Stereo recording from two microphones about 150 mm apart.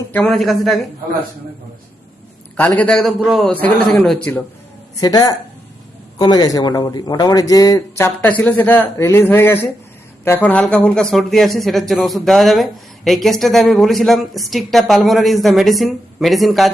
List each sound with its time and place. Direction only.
0.1 s a woman's voice: 5° left (ahead or behind)
2.6 s a woman's voice: 10° left (ahead or behind)
3.5 s a man's voice: 10° left (ahead or behind)
4.9 s a woman's voice: 25° left (ahead or behind); by 16.7 s centre (ahead or behind)